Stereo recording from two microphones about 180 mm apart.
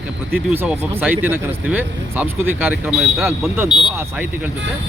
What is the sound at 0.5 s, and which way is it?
Speech, 10° right (ahead or behind).